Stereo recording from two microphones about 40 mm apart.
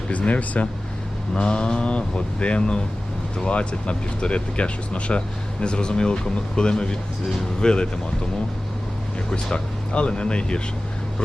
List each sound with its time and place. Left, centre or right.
0.1 s speech: left
9.3 s speech: left